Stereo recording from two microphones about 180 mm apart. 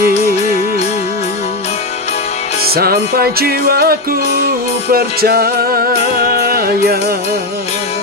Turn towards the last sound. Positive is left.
turn(degrees=-55)  # may be behind; listen again after turning